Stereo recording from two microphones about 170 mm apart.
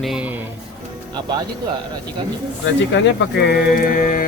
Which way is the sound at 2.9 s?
90° left.